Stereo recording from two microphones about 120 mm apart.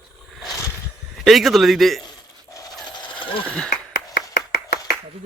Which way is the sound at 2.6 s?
35° left (ahead or behind).